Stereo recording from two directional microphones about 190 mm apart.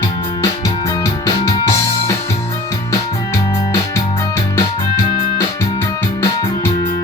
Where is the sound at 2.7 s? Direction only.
15° left (ahead or behind).